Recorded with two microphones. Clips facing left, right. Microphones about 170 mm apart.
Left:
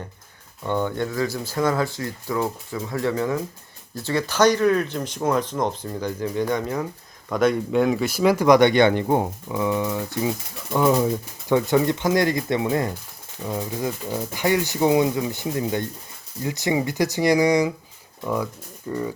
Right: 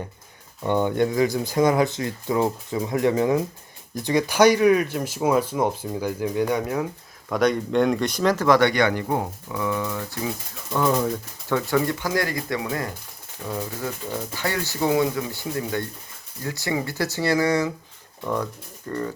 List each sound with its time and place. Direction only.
0.6 s speech: 20° right (ahead or behind); by 17.7 s 15° left (ahead or behind)
18.9 s speech: 10° left (ahead or behind)